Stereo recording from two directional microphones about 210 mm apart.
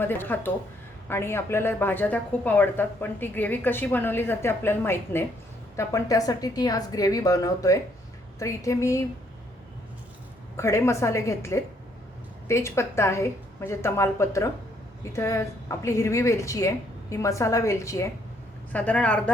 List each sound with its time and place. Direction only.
0.0 s a woman's voice: 10° left (ahead or behind)
10.6 s a woman's voice: 15° left (ahead or behind)